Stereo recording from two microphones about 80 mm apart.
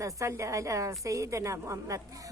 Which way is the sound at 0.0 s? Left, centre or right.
Right.